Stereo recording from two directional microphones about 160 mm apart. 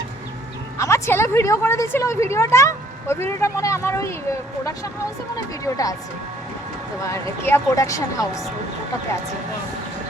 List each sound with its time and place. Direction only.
0.8 s speech: 20° left (ahead or behind)
7.1 s speech: 15° left (ahead or behind)